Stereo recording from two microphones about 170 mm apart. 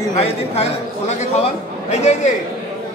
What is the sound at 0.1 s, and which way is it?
A man's voice, 40° left (ahead or behind).